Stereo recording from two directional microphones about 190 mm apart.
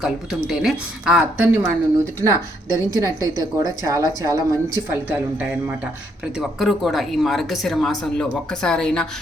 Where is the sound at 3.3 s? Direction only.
20° right (ahead or behind).